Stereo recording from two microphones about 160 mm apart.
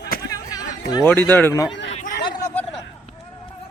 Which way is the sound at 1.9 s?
55° left (ahead or behind).